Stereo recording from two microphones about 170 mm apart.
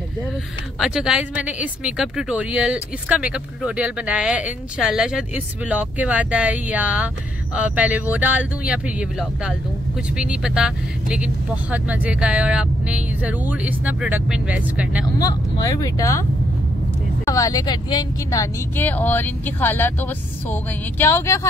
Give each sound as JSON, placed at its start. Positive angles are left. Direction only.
{"t": 0.7, "sound": "speech", "side_deg": -5}
{"t": 15.1, "sound": "speech", "side_deg": 20}